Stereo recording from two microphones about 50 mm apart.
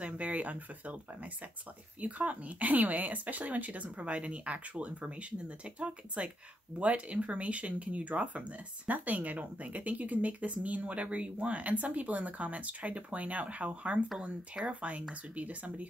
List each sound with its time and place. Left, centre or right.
0.0 s speech: right
14.2 s speech: centre
14.7 s speech: right